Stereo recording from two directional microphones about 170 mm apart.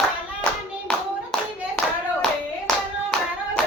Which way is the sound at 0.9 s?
5° left (ahead or behind).